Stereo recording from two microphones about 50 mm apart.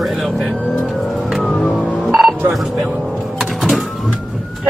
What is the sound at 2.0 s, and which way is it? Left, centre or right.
Telephone dialing, centre.